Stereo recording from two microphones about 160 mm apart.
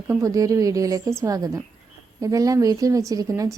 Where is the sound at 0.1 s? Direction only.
20° right (ahead or behind).